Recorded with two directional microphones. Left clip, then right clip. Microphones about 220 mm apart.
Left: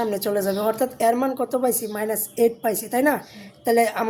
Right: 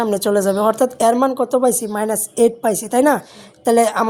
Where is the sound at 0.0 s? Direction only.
25° right (ahead or behind).